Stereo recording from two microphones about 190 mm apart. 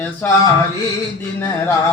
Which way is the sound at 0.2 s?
10° left (ahead or behind).